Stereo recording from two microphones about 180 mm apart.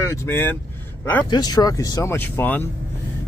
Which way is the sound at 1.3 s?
20° left (ahead or behind).